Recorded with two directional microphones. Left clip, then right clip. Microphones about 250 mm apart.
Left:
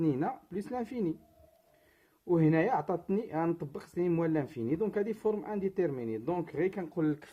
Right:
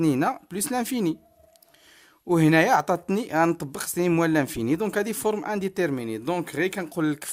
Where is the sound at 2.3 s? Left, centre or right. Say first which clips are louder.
Right 9 dB; right.